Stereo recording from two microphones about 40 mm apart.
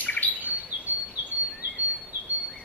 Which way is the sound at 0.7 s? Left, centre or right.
Right.